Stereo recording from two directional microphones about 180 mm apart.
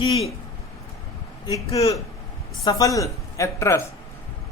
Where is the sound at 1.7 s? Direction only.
20° left (ahead or behind).